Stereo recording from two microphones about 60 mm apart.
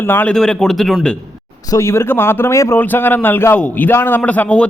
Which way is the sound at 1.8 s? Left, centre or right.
Left.